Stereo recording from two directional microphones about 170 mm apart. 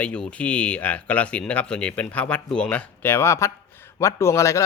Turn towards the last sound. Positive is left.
turn(degrees=15)  # may be behind; listen again after turning